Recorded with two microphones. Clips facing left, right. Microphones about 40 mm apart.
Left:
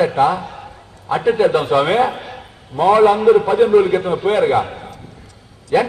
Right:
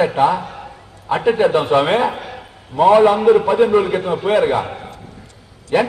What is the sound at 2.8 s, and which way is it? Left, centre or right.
A man's voice, right.